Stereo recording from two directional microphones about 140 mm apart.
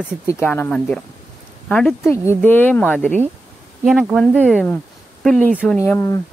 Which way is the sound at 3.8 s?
Centre (ahead or behind).